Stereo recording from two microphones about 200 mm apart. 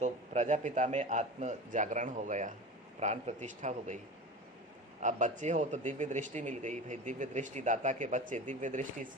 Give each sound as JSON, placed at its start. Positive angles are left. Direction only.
{"t": 0.0, "sound": "speech", "side_deg": -35}
{"t": 5.0, "sound": "speech", "side_deg": -40}